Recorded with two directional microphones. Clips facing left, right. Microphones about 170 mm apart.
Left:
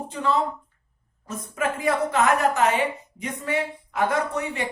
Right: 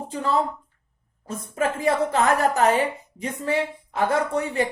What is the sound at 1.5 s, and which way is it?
A woman's voice, 30° right (ahead or behind).